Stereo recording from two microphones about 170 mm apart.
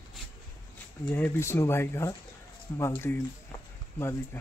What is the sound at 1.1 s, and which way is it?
Speech, 15° left (ahead or behind).